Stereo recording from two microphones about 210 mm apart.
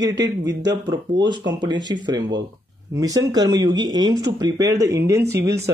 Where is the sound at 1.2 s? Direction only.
20° right (ahead or behind).